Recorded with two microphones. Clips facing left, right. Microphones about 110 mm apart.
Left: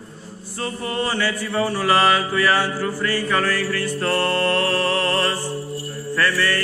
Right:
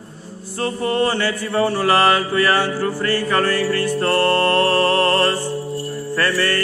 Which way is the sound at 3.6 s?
35° right (ahead or behind).